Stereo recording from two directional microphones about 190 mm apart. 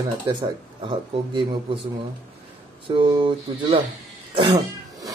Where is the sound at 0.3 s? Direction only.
25° right (ahead or behind).